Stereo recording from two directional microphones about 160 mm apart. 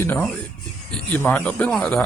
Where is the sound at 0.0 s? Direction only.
10° left (ahead or behind).